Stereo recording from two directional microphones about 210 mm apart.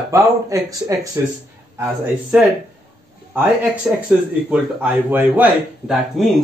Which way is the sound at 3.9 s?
Centre (ahead or behind).